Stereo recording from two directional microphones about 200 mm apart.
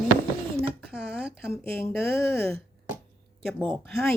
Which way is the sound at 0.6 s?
5° right (ahead or behind).